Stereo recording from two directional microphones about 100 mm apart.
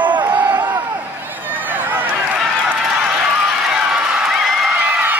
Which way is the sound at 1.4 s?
20° right (ahead or behind).